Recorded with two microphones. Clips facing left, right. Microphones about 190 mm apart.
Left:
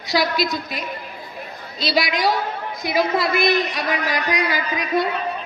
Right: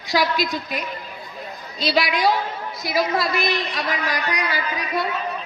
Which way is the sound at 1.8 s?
40° left (ahead or behind).